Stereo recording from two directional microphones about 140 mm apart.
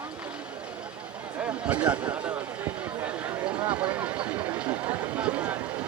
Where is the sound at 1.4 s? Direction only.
10° right (ahead or behind).